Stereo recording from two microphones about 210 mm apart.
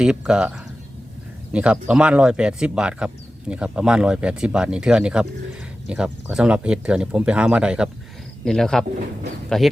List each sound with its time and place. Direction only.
0.0 s speech: 5° right (ahead or behind)